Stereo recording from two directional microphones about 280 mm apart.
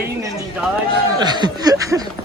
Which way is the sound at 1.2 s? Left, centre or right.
Centre.